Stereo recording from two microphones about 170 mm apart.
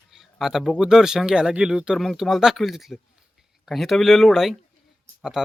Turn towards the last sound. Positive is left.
turn(degrees=0)  # may be behind; listen again after turning